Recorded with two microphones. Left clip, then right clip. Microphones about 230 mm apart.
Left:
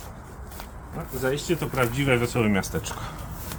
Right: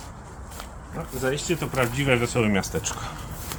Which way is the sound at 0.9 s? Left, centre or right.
Centre.